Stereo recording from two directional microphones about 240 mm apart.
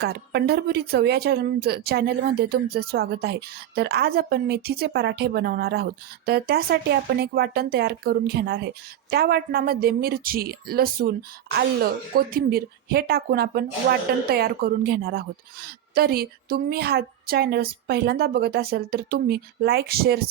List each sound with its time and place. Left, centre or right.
0.0 s speech: right